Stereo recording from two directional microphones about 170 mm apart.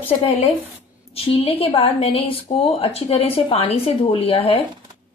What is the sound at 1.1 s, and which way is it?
A woman's voice, 35° left (ahead or behind).